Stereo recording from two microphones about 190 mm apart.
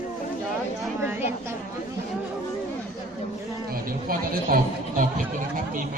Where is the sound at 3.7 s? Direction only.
50° right (ahead or behind).